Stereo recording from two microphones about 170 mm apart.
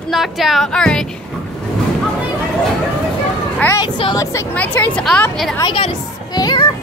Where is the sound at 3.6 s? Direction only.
20° left (ahead or behind).